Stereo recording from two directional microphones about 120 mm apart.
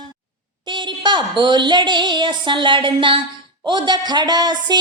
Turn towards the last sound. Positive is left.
turn(degrees=-35)  # may be behind; listen again after turning